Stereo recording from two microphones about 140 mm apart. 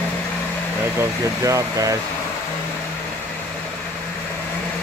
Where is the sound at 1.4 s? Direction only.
25° right (ahead or behind).